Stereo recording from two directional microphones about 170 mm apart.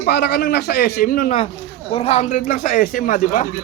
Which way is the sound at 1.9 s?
35° left (ahead or behind).